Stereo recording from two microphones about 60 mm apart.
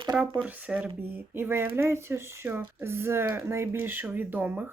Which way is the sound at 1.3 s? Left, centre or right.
Right.